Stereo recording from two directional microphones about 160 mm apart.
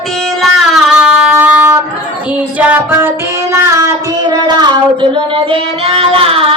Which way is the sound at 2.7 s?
15° right (ahead or behind).